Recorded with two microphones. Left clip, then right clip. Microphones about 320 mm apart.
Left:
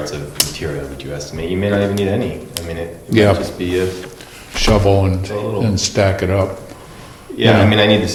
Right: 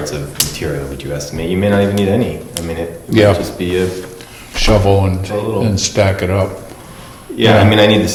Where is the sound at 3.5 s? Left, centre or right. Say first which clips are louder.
Right 2 dB; right.